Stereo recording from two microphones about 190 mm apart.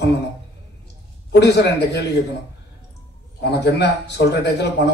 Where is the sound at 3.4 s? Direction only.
60° left (ahead or behind).